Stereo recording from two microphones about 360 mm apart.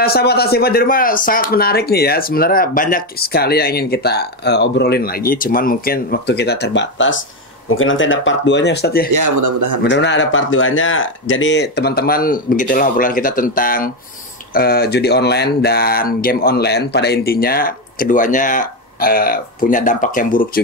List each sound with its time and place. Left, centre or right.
0.0 s speech: left
9.1 s speech: right
9.8 s speech: left